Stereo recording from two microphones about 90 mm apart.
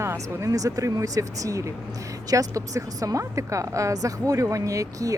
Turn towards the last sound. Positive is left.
turn(degrees=-40)  # may be behind; listen again after turning